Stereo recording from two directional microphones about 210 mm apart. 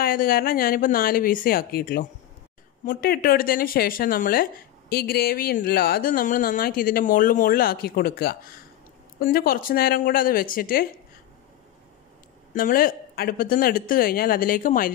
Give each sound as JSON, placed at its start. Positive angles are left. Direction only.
{"t": 0.0, "sound": "speech", "side_deg": 45}
{"t": 12.5, "sound": "speech", "side_deg": 45}